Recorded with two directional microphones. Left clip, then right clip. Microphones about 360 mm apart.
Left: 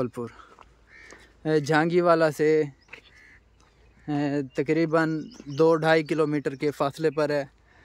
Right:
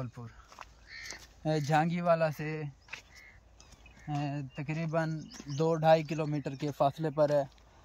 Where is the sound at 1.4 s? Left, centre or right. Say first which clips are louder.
Left 7 dB; centre.